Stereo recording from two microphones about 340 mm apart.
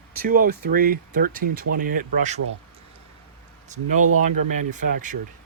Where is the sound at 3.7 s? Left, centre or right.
Right.